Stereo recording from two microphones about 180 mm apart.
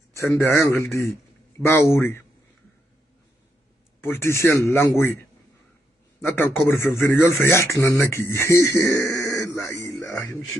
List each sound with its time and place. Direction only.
0.1 s speech: 15° left (ahead or behind)
4.0 s speech: 15° left (ahead or behind)
6.2 s speech: 10° left (ahead or behind)